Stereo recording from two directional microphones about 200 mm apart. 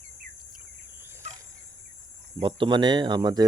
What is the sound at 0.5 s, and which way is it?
Cricket, 10° right (ahead or behind).